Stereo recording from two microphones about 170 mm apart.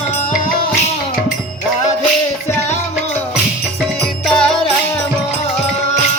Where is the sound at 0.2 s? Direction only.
50° left (ahead or behind).